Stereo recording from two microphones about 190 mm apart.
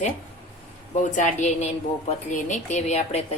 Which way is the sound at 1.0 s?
40° left (ahead or behind).